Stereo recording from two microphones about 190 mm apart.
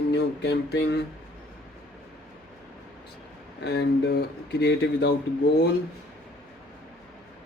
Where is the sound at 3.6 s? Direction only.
60° left (ahead or behind).